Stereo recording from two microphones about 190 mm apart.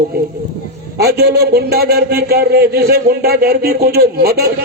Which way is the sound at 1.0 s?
55° right (ahead or behind).